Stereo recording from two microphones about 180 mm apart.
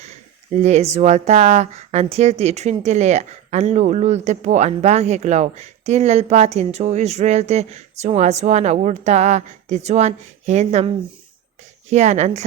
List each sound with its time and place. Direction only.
0.0 s speech: 40° right (ahead or behind)